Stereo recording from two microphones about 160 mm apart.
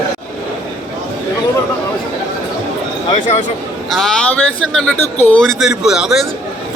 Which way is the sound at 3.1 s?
50° left (ahead or behind).